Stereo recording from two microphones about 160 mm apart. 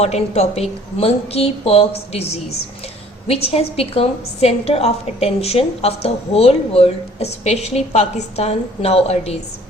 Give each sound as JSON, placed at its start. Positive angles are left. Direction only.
{"t": 0.0, "sound": "a woman's voice", "side_deg": 40}